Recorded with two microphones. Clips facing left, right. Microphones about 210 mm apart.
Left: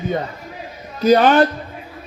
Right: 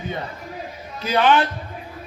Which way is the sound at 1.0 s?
40° left (ahead or behind).